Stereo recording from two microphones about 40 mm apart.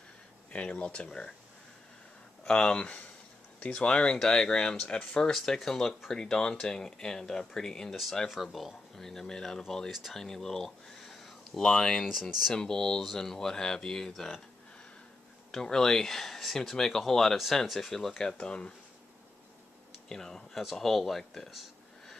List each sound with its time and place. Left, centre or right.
0.5 s speech: left
2.4 s speech: left
7.9 s speech: centre
9.0 s speech: centre
9.8 s speech: centre
10.1 s speech: centre
12.1 s speech: centre
12.5 s speech: centre
15.5 s speech: centre
18.1 s speech: centre
20.1 s speech: centre